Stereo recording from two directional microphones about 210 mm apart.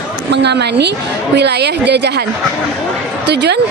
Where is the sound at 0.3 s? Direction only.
55° right (ahead or behind).